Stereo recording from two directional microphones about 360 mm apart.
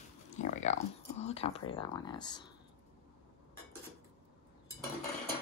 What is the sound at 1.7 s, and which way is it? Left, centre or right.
Speech, centre.